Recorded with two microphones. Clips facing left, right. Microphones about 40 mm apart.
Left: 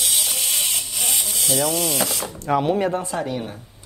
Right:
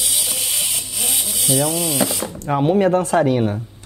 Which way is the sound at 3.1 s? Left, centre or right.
Right.